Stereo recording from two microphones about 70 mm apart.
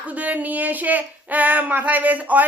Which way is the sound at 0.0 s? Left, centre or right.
Right.